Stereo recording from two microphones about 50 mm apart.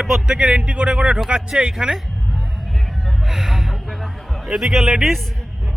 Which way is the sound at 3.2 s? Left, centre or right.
Centre.